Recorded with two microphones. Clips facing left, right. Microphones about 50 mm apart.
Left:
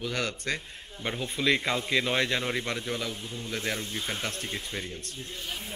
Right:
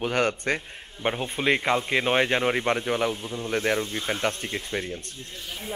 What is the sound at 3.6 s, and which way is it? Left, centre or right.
Speech, right.